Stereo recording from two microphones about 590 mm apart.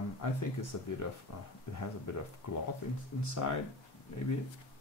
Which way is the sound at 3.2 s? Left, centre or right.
Left.